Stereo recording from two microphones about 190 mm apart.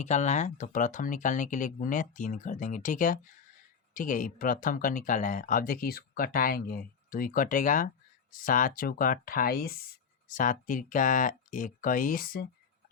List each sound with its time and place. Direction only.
0.0 s speech: 40° left (ahead or behind)